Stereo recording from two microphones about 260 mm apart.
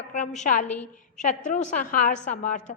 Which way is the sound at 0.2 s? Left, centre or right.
Left.